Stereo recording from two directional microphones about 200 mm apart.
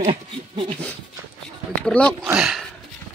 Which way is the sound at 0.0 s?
35° right (ahead or behind).